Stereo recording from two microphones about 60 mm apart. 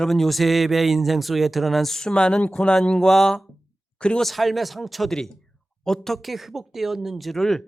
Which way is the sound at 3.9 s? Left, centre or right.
Centre.